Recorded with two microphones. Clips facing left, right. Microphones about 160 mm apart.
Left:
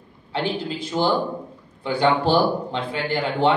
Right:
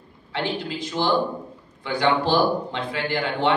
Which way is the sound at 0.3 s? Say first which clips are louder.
Left 2 dB; 30° left (ahead or behind).